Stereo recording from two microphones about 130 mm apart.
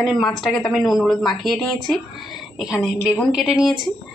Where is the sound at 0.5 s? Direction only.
5° left (ahead or behind).